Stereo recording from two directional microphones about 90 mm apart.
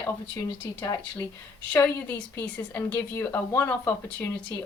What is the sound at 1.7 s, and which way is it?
A woman's voice, 15° left (ahead or behind).